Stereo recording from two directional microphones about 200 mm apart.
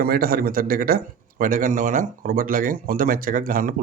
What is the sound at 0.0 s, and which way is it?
Speech, 50° right (ahead or behind).